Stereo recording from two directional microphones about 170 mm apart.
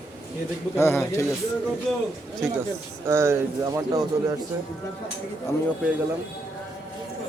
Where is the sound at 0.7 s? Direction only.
15° left (ahead or behind).